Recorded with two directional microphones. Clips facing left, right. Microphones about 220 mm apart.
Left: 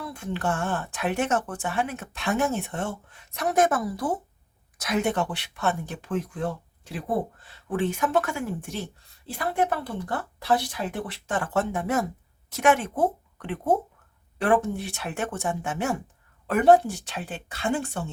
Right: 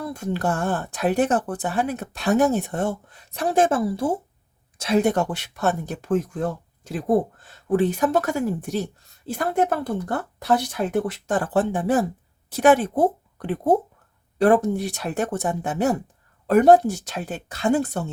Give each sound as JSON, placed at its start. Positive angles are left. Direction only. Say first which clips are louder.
{"t": 0.0, "sound": "speech", "louder": "right 5 dB", "side_deg": -40}